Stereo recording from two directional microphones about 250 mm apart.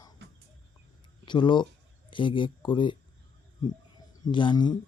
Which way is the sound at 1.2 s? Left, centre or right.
Centre.